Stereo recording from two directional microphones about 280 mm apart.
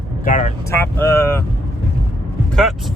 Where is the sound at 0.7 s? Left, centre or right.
Centre.